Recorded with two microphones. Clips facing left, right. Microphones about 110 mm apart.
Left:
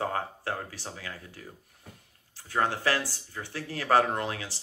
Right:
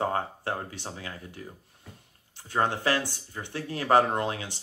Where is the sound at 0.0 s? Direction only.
25° right (ahead or behind).